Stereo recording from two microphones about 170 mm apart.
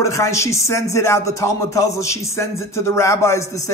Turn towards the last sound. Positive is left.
turn(degrees=15)  # may be behind; listen again after turning